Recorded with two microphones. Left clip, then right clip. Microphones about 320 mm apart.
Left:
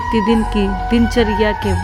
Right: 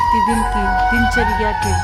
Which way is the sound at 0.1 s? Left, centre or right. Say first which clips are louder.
Right 2 dB; centre.